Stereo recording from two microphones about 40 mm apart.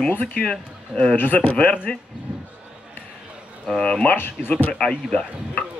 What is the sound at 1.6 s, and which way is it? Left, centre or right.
Speech, left.